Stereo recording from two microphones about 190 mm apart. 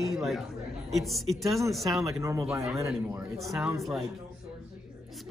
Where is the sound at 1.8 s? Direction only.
15° right (ahead or behind).